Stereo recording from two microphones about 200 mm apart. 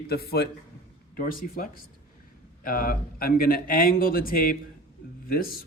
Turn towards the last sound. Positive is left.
turn(degrees=45)  # may be behind; listen again after turning